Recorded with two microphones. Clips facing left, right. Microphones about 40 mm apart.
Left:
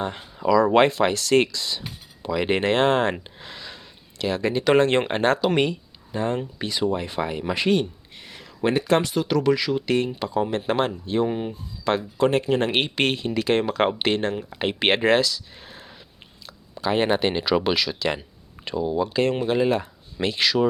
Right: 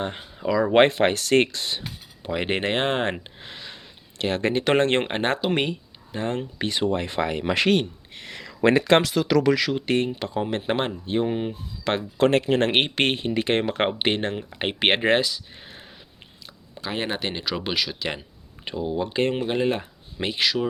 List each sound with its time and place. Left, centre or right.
0.0 s speech: right
0.7 s speech: right
2.2 s speech: right
3.4 s a sound: right
4.2 s speech: right
6.6 s speech: right
7.8 s speech: right
8.3 s speech: right
9.7 s speech: right
12.1 s speech: right; by 15.9 s centre
16.8 s speech: centre
17.6 s speech: centre
18.8 s speech: right
20.2 s speech: centre